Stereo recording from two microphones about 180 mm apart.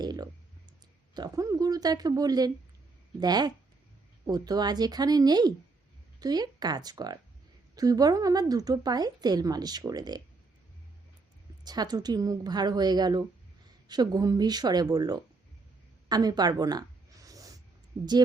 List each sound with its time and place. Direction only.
0.0 s clicking: 20° right (ahead or behind)
1.1 s a woman's voice: 20° right (ahead or behind)
11.6 s a woman's voice: 20° right (ahead or behind)
16.0 s a sound: 20° right (ahead or behind)